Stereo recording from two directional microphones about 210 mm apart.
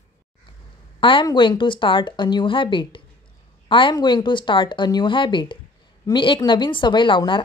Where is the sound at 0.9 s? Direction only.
25° left (ahead or behind).